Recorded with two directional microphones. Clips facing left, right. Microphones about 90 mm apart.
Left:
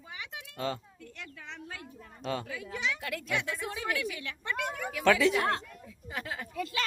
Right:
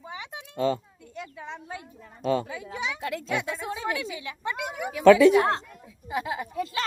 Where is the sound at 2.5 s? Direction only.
25° right (ahead or behind).